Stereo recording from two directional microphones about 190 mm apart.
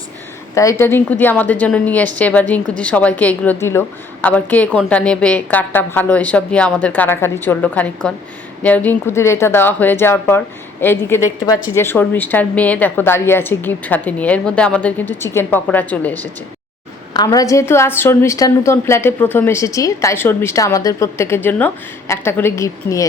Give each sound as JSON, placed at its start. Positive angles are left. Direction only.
{"t": 0.5, "sound": "speech", "side_deg": 15}